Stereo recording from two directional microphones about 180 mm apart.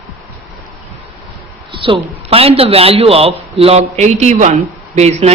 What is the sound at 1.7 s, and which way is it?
Speech, 30° right (ahead or behind).